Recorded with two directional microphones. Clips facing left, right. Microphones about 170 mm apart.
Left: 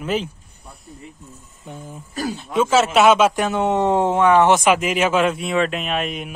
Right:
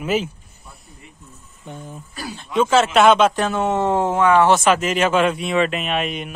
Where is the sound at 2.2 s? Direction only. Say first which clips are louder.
Left 8 dB; 45° left (ahead or behind).